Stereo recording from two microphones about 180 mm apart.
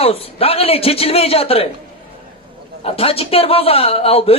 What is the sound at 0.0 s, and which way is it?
A man's voice, 35° left (ahead or behind).